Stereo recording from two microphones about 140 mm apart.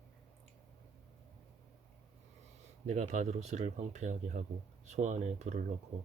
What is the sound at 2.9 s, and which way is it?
Speech, 55° right (ahead or behind).